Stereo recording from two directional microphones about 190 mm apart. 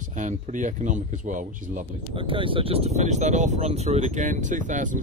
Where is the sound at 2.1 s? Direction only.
30° right (ahead or behind).